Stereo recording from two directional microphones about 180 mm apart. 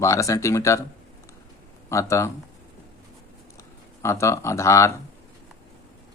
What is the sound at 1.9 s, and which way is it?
Speech, 15° left (ahead or behind).